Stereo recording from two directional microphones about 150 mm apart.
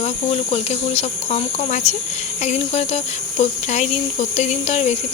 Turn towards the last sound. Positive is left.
turn(degrees=45)  # may be behind; listen again after turning